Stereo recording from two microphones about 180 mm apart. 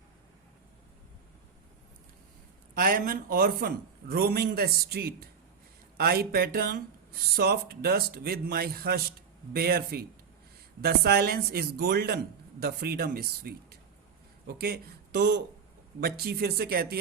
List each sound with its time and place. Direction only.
2.7 s speech: 50° right (ahead or behind)